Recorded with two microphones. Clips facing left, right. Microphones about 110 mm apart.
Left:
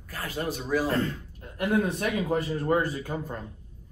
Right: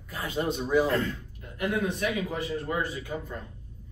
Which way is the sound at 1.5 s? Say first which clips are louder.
Left 3 dB; 40° left (ahead or behind).